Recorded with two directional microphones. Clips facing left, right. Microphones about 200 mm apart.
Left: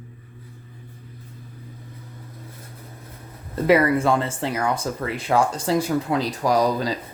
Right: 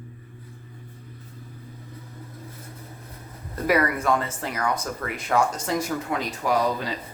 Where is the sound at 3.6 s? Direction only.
25° left (ahead or behind).